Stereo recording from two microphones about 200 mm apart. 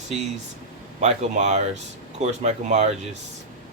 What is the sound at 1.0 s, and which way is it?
Speech, 35° right (ahead or behind).